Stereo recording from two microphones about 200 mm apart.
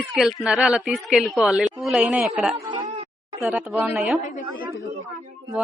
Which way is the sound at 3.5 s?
5° right (ahead or behind).